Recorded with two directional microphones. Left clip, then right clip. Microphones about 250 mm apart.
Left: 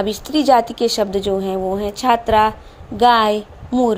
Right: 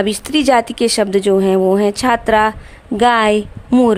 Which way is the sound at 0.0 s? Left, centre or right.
Right.